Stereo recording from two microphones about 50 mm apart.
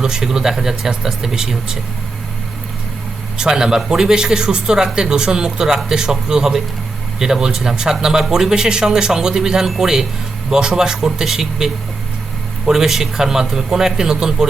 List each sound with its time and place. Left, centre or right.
0.0 s speech: centre
3.3 s speech: centre